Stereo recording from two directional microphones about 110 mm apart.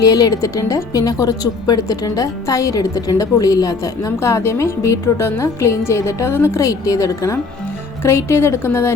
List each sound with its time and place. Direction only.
0.0 s speech: 35° left (ahead or behind)